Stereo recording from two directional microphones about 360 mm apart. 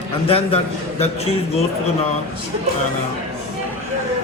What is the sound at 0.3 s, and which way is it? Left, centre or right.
A man's voice, centre.